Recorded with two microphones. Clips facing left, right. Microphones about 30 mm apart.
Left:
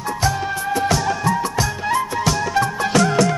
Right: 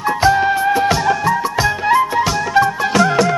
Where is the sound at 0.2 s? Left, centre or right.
Right.